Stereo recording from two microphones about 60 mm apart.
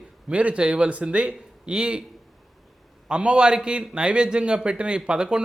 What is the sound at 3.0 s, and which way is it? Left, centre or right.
Speech, centre.